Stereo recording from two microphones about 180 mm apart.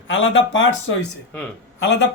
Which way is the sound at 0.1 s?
90° left.